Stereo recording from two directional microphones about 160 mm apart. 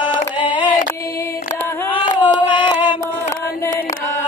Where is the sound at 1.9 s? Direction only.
30° left (ahead or behind).